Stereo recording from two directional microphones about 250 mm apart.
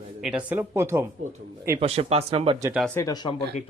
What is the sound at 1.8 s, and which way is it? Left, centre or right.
Speech, right.